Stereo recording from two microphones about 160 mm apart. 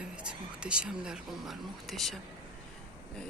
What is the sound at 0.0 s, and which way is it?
Speech, 5° right (ahead or behind).